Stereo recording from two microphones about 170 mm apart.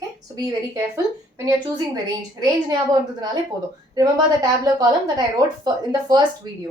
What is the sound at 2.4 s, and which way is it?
A woman's voice, 25° right (ahead or behind).